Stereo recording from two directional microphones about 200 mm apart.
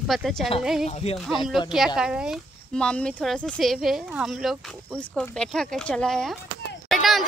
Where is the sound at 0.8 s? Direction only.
35° left (ahead or behind).